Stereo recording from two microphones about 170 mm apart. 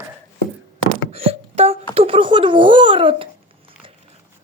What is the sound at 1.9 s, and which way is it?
Babbling, 35° right (ahead or behind).